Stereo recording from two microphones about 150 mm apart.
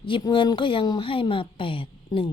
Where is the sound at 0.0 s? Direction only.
30° left (ahead or behind).